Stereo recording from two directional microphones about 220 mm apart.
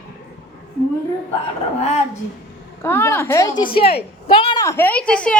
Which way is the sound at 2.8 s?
10° left (ahead or behind).